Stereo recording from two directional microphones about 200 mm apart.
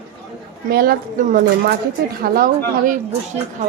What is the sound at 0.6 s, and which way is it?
Speech, 50° right (ahead or behind).